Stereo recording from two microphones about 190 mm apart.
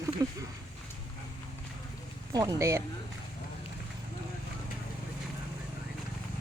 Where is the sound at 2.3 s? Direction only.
20° right (ahead or behind).